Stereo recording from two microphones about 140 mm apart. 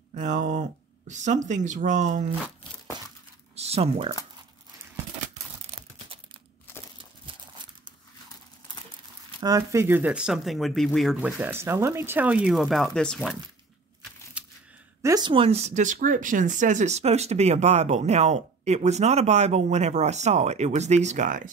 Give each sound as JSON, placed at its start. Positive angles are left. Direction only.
{"t": 0.1, "sound": "speech", "side_deg": -60}
{"t": 2.9, "sound": "breaking", "side_deg": -30}
{"t": 3.5, "sound": "speech", "side_deg": -45}
{"t": 7.2, "sound": "horse", "side_deg": -35}
{"t": 9.4, "sound": "speech", "side_deg": -25}
{"t": 11.1, "sound": "speech", "side_deg": -10}
{"t": 14.4, "sound": "a sound", "side_deg": -10}
{"t": 15.0, "sound": "a sound", "side_deg": -20}
{"t": 15.2, "sound": "speech", "side_deg": -40}